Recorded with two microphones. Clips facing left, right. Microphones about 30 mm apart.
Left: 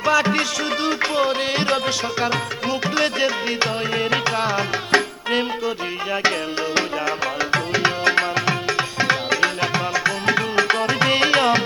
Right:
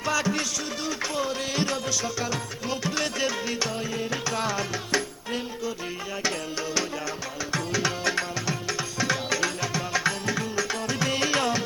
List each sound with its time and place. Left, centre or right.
0.0 s music: left
3.9 s music: left
4.4 s music: left
4.7 s music: left
7.5 s tabla: left
10.2 s music: left